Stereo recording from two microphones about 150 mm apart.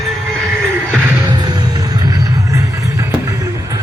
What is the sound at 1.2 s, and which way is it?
Music, 30° right (ahead or behind).